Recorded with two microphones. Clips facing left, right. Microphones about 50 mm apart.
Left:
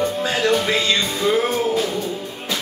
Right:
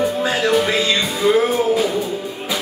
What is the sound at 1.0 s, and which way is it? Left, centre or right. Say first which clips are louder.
Music: right 3 dB; centre.